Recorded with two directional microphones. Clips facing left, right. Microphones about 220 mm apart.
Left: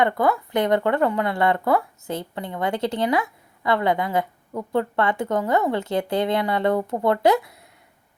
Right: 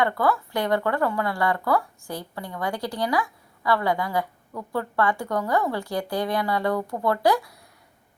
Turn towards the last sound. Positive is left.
turn(degrees=20)  # may be behind; listen again after turning